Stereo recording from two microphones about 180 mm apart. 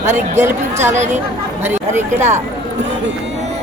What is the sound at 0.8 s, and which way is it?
Speech, 40° right (ahead or behind).